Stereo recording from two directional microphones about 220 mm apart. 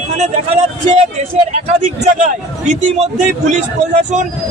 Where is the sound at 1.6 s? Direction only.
35° right (ahead or behind).